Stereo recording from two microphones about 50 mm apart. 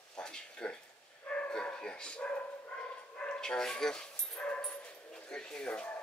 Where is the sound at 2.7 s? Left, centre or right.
Centre.